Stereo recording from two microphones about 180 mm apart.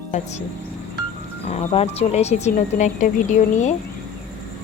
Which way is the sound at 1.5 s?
35° left (ahead or behind).